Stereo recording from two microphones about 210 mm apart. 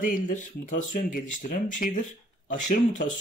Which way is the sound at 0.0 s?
40° left (ahead or behind).